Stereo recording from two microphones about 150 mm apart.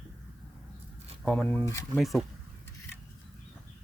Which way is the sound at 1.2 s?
10° left (ahead or behind).